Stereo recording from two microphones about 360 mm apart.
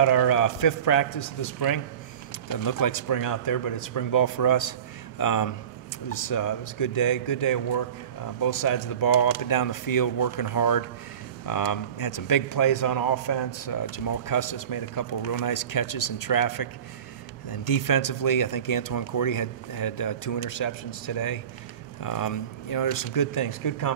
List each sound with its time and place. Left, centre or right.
0.0 s a man's voice: left
22.0 s a man's voice: left